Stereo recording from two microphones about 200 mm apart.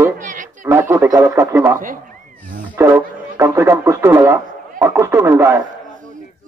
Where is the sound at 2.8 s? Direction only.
15° right (ahead or behind).